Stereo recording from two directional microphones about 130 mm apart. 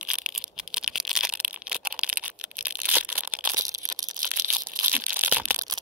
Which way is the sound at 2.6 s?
10° right (ahead or behind).